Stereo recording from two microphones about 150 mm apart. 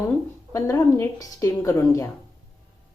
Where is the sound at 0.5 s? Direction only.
20° left (ahead or behind).